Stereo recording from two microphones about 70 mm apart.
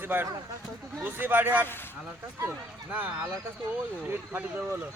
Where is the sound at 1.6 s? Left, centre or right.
Left.